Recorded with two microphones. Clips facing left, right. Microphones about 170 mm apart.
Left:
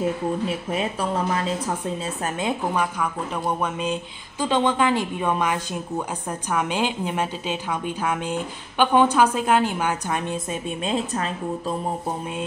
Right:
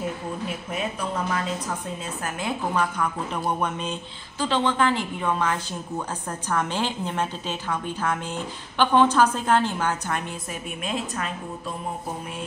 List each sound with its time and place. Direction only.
0.7 s a woman's voice: 30° left (ahead or behind)
2.4 s a woman's voice: 10° left (ahead or behind)
3.6 s a sound: 5° left (ahead or behind)
4.4 s a woman's voice: 15° left (ahead or behind)
10.8 s a woman's voice: 30° left (ahead or behind)